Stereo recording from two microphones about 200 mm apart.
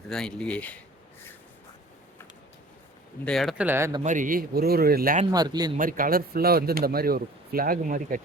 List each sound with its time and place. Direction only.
0.1 s speech: 5° left (ahead or behind)
3.2 s speech: centre (ahead or behind)
4.0 s speech: 40° right (ahead or behind)
5.3 s a man's voice: 20° right (ahead or behind)
5.7 s speech: 45° right (ahead or behind)